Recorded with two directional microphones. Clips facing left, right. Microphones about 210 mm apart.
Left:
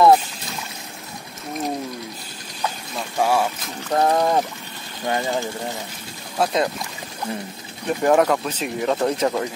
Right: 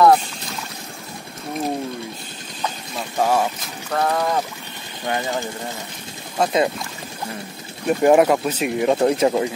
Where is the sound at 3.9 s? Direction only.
30° left (ahead or behind).